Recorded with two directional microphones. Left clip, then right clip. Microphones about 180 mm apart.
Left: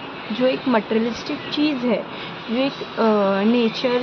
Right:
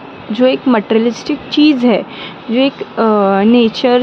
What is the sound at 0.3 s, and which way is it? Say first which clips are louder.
Speech: right 8 dB; 40° right (ahead or behind).